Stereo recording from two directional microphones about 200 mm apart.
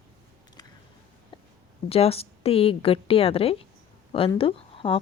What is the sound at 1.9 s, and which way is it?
Speech, 30° left (ahead or behind).